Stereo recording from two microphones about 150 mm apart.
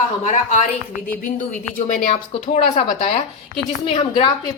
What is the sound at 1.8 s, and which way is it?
A woman's voice, 55° left (ahead or behind).